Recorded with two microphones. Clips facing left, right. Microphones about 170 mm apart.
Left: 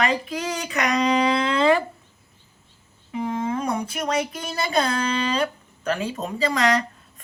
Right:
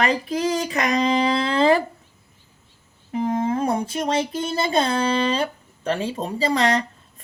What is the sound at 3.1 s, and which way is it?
Speech, 40° right (ahead or behind).